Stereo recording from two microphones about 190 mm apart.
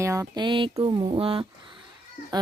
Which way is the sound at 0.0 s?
15° right (ahead or behind).